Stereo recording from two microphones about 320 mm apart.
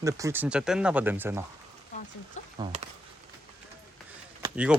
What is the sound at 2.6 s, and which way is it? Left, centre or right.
Speech, centre.